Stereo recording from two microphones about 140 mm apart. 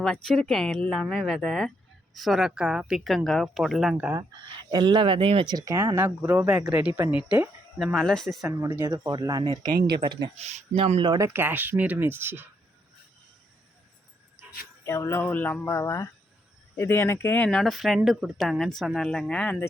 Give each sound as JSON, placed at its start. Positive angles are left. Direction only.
{"t": 0.0, "sound": "speech", "side_deg": 5}
{"t": 4.2, "sound": "speech", "side_deg": -30}
{"t": 7.9, "sound": "speech", "side_deg": 5}
{"t": 8.6, "sound": "speech", "side_deg": -20}
{"t": 10.3, "sound": "speech", "side_deg": -50}
{"t": 11.0, "sound": "speech", "side_deg": -30}
{"t": 11.3, "sound": "speech", "side_deg": -15}
{"t": 14.8, "sound": "speech", "side_deg": 20}
{"t": 17.5, "sound": "speech", "side_deg": 0}